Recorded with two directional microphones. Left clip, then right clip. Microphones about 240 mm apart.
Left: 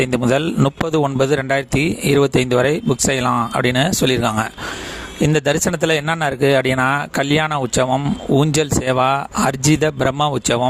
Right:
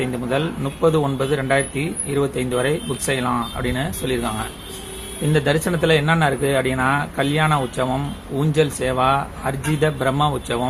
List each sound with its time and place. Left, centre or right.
0.0 s speech: left